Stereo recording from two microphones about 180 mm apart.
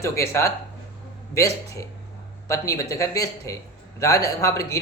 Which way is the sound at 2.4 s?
15° left (ahead or behind).